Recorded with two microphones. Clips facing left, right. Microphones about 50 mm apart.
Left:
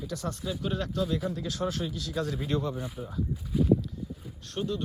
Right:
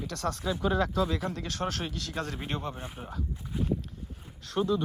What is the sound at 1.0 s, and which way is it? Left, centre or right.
Speech, right.